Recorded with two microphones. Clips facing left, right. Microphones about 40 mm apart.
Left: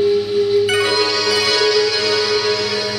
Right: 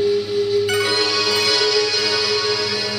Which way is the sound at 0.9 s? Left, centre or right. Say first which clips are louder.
Left 2 dB; centre.